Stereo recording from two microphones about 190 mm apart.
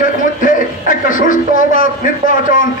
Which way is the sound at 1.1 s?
45° left (ahead or behind).